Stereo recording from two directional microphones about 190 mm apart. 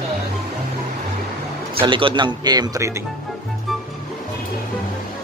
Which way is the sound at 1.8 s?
25° right (ahead or behind).